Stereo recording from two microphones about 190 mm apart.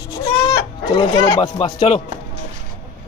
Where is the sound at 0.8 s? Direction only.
25° left (ahead or behind).